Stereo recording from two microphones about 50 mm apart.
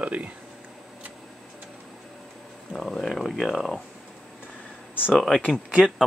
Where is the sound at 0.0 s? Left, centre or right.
Right.